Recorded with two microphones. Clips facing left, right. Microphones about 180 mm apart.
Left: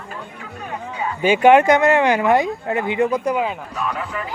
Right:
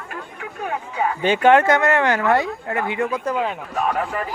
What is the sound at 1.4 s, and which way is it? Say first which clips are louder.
Speech: left 3 dB; 15° left (ahead or behind).